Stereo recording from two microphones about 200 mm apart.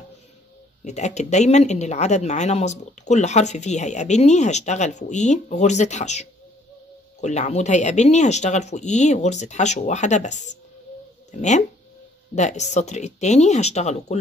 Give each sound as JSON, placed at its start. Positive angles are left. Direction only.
{"t": 0.8, "sound": "speech", "side_deg": 35}